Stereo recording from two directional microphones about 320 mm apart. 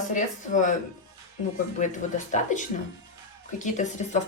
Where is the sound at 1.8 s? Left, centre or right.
Left.